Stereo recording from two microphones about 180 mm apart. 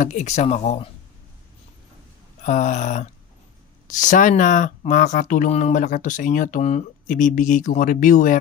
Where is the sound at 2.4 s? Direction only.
45° left (ahead or behind).